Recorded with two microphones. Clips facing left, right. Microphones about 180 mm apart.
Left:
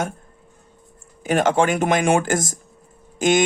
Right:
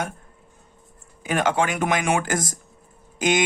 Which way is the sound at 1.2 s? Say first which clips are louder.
Left 4 dB; 45° left (ahead or behind).